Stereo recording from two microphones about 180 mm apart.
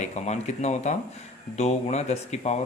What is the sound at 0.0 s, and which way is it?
Speech, 40° left (ahead or behind).